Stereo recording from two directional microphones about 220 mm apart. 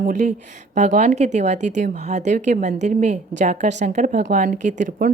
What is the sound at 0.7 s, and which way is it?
A woman's voice, 35° right (ahead or behind).